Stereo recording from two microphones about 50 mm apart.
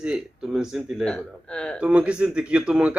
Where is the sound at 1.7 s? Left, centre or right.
Right.